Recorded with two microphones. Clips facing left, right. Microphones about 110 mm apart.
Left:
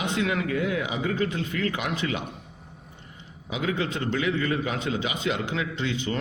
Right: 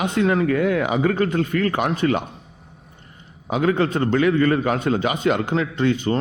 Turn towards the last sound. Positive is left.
turn(degrees=-45)  # may be behind; listen again after turning